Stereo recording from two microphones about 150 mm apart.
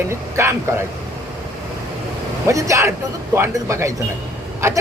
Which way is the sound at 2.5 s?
20° right (ahead or behind).